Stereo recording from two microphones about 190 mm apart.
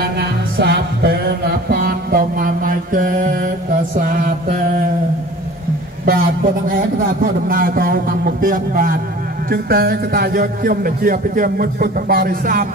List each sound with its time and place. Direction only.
0.0 s music: 60° right (ahead or behind)
6.0 s a man's voice: 50° right (ahead or behind)